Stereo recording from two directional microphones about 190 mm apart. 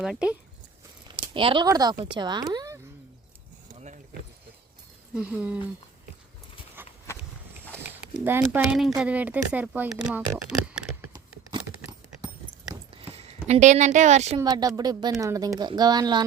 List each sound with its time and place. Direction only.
0.0 s speech: 5° right (ahead or behind)
1.0 s speech: 25° right (ahead or behind)
3.8 s a sound: 40° right (ahead or behind)
5.1 s speech: 5° right (ahead or behind)
6.8 s walk: 10° right (ahead or behind)
8.1 s speech: 10° right (ahead or behind)
11.1 s a sound: 25° right (ahead or behind)
13.0 s a sound: 35° right (ahead or behind)
13.5 s speech: 40° right (ahead or behind)
14.3 s speech: 20° right (ahead or behind)